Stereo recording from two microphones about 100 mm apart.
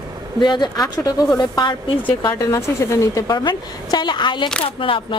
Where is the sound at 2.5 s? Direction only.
30° left (ahead or behind).